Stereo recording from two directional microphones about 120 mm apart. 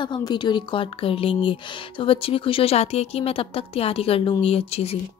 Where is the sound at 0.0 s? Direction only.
40° left (ahead or behind).